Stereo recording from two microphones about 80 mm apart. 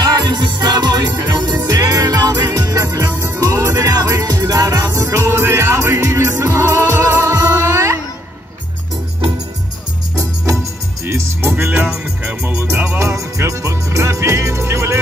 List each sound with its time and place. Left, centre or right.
0.0 s music: right
11.1 s music: right